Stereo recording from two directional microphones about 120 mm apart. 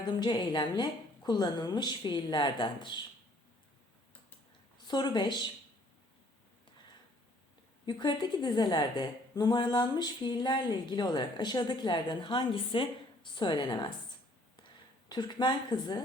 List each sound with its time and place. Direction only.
0.2 s a woman's voice: 40° left (ahead or behind)
4.9 s a woman's voice: 35° left (ahead or behind)
7.9 s a woman's voice: 40° left (ahead or behind)
15.1 s a woman's voice: 35° left (ahead or behind)